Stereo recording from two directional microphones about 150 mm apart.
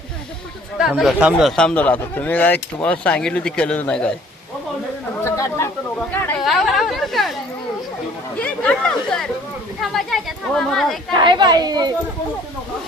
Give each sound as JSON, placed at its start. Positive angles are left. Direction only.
{"t": 0.8, "sound": "speech", "side_deg": 0}
{"t": 5.2, "sound": "speech", "side_deg": 20}
{"t": 6.4, "sound": "speech", "side_deg": 0}
{"t": 8.4, "sound": "speech", "side_deg": 10}
{"t": 11.1, "sound": "speech", "side_deg": -30}